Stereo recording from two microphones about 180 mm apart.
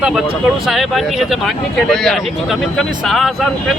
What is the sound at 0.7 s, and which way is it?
Speech, centre (ahead or behind).